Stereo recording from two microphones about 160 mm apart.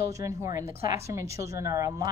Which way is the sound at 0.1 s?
20° right (ahead or behind).